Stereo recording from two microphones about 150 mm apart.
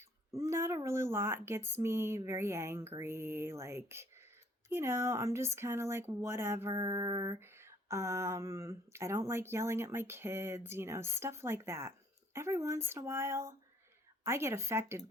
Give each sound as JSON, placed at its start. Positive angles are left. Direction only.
{"t": 0.3, "sound": "speech", "side_deg": -20}